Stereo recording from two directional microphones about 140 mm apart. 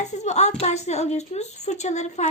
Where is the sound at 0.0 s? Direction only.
55° left (ahead or behind).